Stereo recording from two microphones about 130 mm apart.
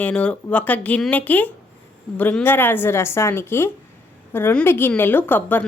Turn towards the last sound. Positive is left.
turn(degrees=15)  # may be behind; listen again after turning